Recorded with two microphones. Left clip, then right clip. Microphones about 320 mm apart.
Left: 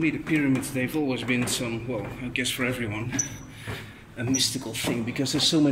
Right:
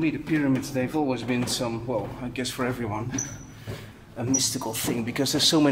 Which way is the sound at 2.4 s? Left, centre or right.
Right.